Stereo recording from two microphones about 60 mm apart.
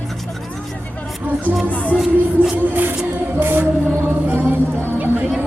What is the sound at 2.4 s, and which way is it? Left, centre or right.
Music, right.